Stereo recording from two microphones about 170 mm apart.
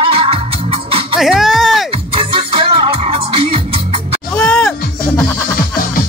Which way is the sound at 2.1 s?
30° right (ahead or behind).